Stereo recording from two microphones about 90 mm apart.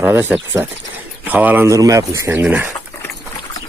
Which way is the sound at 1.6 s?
35° right (ahead or behind).